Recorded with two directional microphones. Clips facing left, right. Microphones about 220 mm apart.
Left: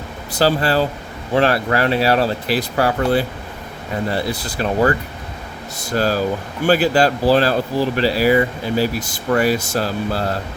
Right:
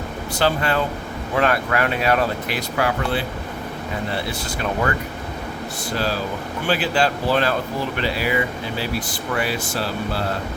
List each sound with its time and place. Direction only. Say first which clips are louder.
0.3 s speech: left 4 dB; 35° left (ahead or behind)
4.3 s speech: left 4 dB; 35° left (ahead or behind)
6.7 s speech: left 6 dB; 40° left (ahead or behind)